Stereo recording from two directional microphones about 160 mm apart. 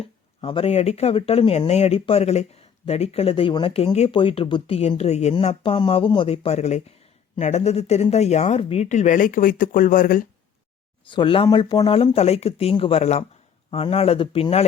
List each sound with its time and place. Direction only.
0.0 s speech: 35° left (ahead or behind)
5.7 s speech: 30° left (ahead or behind); by 10.2 s 60° left (ahead or behind)
11.1 s speech: 30° left (ahead or behind)